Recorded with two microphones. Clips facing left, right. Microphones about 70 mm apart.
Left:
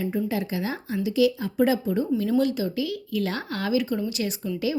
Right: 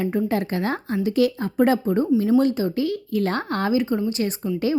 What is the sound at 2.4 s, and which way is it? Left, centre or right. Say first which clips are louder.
A woman's voice: right 4 dB; right.